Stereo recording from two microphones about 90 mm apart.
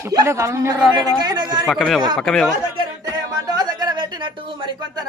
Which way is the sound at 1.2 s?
50° right (ahead or behind).